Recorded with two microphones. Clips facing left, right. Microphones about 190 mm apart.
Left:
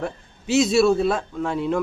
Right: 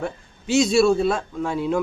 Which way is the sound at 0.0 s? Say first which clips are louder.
Even; centre (ahead or behind).